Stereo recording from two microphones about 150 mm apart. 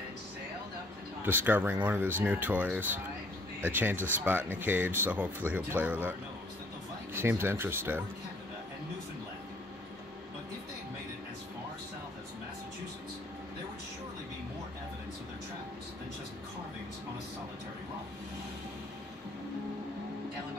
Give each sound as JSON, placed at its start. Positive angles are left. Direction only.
{"t": 1.2, "sound": "speech", "side_deg": -15}
{"t": 7.2, "sound": "speech", "side_deg": -15}